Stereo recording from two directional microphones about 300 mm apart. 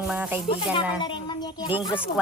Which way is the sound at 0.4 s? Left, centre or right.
Centre.